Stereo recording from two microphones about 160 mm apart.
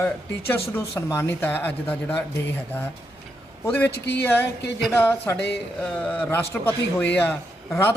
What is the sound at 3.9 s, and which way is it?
Speech, 90° left.